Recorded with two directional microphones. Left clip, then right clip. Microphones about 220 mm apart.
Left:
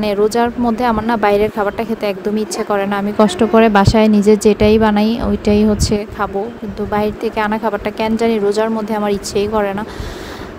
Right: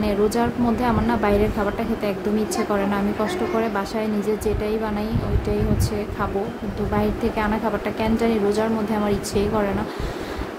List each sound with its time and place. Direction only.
0.0 s speech: 35° left (ahead or behind)